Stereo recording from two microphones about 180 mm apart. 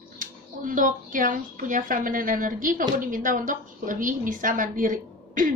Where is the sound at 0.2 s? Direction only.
45° right (ahead or behind).